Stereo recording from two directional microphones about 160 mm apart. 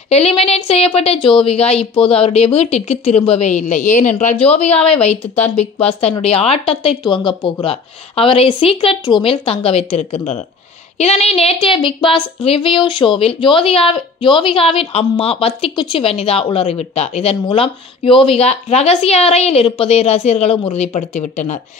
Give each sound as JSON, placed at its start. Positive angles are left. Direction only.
{"t": 0.1, "sound": "a woman's voice", "side_deg": 40}
{"t": 5.3, "sound": "speech", "side_deg": 10}
{"t": 5.8, "sound": "a woman's voice", "side_deg": 40}